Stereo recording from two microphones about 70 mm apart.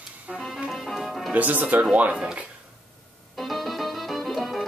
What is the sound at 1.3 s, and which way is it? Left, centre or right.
Speech, right.